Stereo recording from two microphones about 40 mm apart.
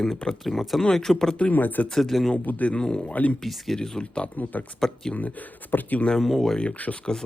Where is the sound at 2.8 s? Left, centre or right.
Centre.